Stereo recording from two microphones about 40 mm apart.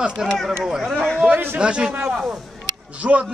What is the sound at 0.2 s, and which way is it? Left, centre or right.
Speech, centre.